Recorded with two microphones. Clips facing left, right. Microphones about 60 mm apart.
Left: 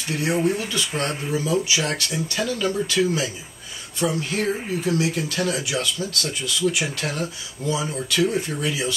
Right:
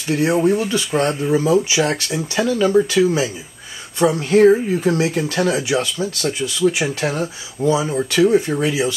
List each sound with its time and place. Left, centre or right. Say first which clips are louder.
0.1 s speech: right 6 dB; right
4.0 s speech: right 11 dB; right